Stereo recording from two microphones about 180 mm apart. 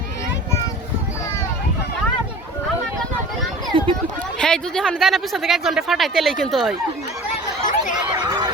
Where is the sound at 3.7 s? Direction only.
30° right (ahead or behind).